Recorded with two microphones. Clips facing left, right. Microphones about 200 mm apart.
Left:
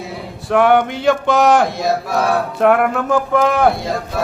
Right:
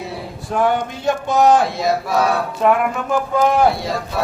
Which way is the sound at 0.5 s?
75° left (ahead or behind).